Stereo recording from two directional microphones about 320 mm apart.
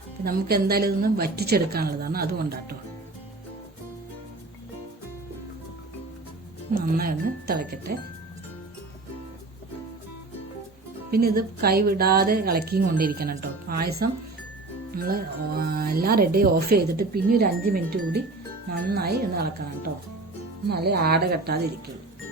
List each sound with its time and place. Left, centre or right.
0.3 s speech: right
6.7 s speech: right
11.1 s speech: right
14.9 s speech: right